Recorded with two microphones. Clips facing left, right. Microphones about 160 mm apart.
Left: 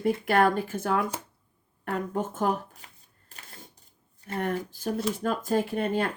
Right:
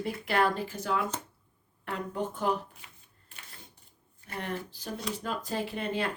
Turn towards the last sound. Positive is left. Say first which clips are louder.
# left 5 dB
turn(degrees=45)  # may be behind; listen again after turning